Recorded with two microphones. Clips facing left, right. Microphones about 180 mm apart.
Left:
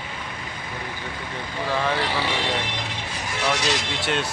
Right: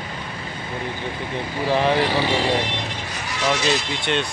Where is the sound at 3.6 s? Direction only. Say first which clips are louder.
Right 3 dB; 90° left.